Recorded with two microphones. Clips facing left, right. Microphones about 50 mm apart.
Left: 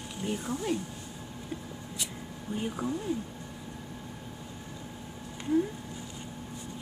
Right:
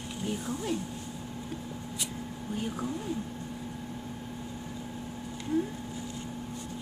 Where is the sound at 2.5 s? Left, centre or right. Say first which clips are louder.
Left 1 dB; centre.